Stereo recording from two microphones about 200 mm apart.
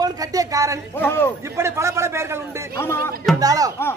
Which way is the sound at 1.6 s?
15° right (ahead or behind).